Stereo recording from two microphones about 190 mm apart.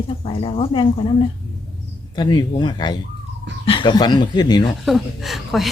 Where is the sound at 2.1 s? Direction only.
20° left (ahead or behind).